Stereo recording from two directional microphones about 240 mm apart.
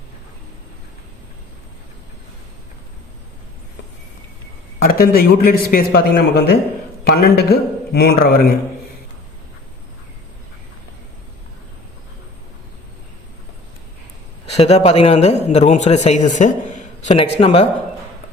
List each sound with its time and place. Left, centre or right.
4.8 s a man's voice: left
14.5 s a man's voice: left